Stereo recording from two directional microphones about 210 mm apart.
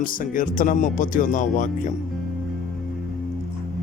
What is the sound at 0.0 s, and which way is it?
Speech, 40° left (ahead or behind).